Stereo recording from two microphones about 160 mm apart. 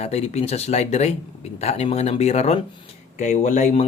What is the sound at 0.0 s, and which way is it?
A man's voice, 40° left (ahead or behind).